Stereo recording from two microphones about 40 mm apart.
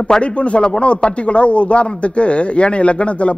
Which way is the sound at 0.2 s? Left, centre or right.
Left.